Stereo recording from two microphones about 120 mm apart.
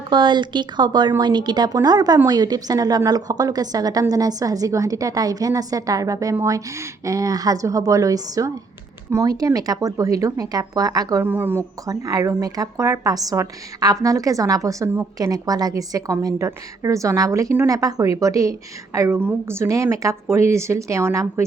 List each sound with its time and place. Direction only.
0.1 s a woman's voice: 40° right (ahead or behind)
11.2 s a woman's voice: 15° right (ahead or behind)
11.9 s a woman's voice: 30° right (ahead or behind)